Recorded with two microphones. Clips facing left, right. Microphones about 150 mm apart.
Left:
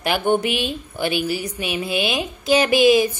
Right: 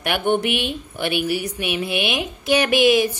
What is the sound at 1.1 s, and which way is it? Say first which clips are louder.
A woman's voice: right 2 dB; 70° right (ahead or behind).